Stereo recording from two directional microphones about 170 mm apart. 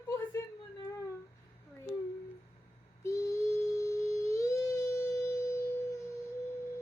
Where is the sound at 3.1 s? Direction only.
20° left (ahead or behind).